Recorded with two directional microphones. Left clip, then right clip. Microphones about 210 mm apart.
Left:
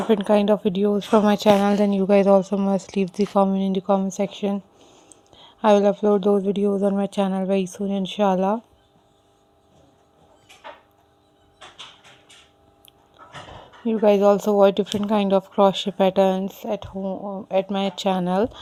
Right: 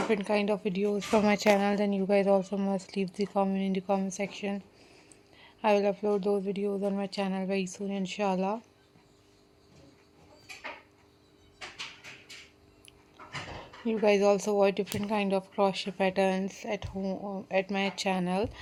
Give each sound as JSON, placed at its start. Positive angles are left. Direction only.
{"t": 0.1, "sound": "a woman's voice", "side_deg": 35}
{"t": 13.8, "sound": "speech", "side_deg": 30}